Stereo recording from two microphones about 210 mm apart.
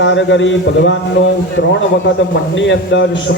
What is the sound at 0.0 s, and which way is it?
Speech, 60° left (ahead or behind).